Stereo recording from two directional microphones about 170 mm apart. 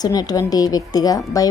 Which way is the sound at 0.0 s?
20° left (ahead or behind).